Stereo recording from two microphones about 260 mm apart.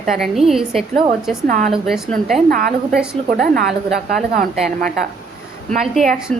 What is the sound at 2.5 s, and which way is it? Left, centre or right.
A woman's voice, right.